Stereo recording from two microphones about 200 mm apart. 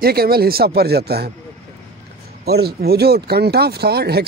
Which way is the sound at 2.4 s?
55° right (ahead or behind).